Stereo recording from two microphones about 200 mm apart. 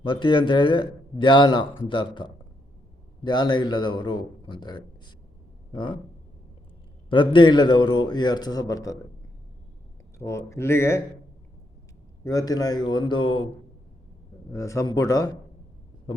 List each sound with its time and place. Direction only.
0.0 s speech: 25° left (ahead or behind)
7.1 s speech: 25° left (ahead or behind)
10.2 s speech: 15° left (ahead or behind)
12.2 s speech: 20° left (ahead or behind)